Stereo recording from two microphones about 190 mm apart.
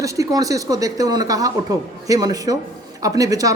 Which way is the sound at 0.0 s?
15° right (ahead or behind).